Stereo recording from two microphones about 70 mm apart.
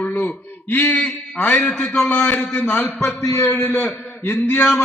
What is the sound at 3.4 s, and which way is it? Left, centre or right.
A man's voice, left.